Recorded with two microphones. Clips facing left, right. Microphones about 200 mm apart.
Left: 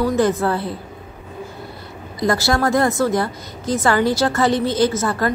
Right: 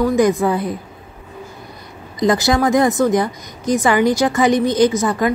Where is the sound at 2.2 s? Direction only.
20° right (ahead or behind).